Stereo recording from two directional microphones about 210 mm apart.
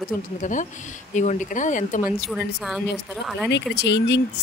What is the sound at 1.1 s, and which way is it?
Speech, 35° left (ahead or behind).